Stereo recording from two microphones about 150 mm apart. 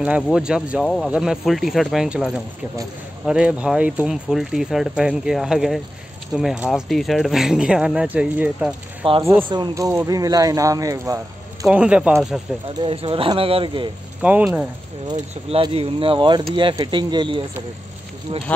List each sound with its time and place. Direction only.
0.0 s speech: 5° right (ahead or behind)
9.0 s speech: 35° right (ahead or behind)
11.6 s speech: 5° right (ahead or behind)
12.8 s speech: 35° right (ahead or behind)
14.2 s speech: 10° right (ahead or behind)
15.0 s speech: 35° right (ahead or behind)